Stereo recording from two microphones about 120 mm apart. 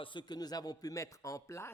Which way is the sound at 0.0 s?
40° left (ahead or behind).